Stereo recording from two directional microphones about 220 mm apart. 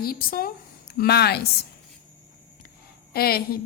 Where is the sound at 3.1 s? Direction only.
45° left (ahead or behind).